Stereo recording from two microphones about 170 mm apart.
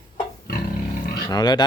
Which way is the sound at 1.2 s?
25° left (ahead or behind).